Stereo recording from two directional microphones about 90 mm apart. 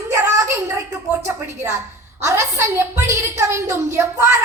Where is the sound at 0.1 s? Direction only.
30° right (ahead or behind).